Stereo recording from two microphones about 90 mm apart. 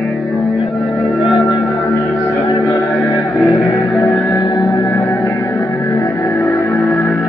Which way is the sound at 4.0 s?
40° left (ahead or behind).